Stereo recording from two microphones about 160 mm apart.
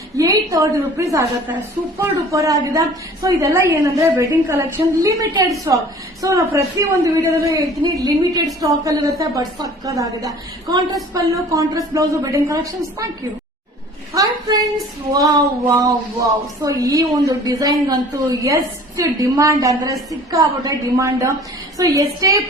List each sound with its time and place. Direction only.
0.2 s a woman's voice: 20° right (ahead or behind)
14.1 s a sound: 20° right (ahead or behind)
15.1 s a woman's voice: 20° right (ahead or behind)